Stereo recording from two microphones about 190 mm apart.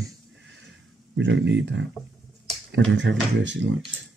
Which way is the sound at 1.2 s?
75° right (ahead or behind).